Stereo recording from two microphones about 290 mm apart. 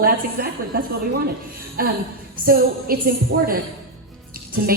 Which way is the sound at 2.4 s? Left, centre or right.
Right.